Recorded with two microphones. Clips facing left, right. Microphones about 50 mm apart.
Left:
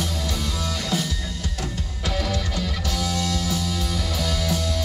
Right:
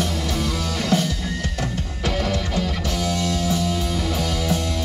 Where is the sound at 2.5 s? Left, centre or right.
Right.